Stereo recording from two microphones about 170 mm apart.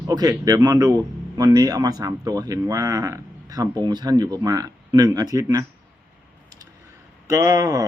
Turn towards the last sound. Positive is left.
turn(degrees=-20)  # may be behind; listen again after turning